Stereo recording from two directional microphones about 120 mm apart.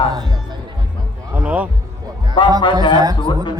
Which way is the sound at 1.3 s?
15° right (ahead or behind).